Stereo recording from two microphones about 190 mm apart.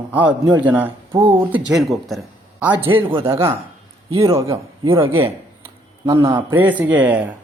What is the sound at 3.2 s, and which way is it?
Speech, 30° right (ahead or behind).